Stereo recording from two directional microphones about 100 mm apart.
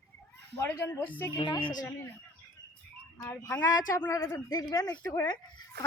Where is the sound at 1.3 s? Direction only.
50° left (ahead or behind).